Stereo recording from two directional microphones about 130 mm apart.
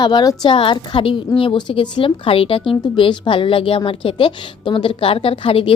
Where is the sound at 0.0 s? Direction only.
35° left (ahead or behind).